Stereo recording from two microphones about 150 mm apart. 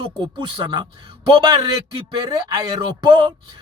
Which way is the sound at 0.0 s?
30° right (ahead or behind).